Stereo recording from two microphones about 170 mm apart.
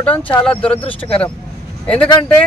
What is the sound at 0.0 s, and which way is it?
Speech, 5° left (ahead or behind).